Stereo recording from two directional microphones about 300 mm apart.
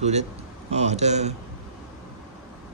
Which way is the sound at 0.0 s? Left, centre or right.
Right.